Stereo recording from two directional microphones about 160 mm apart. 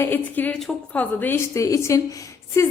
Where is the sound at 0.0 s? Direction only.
10° left (ahead or behind).